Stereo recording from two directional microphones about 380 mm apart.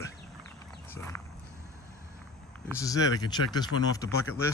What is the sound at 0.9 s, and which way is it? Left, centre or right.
Speech, centre.